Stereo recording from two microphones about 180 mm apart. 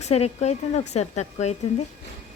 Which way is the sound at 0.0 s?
35° left (ahead or behind).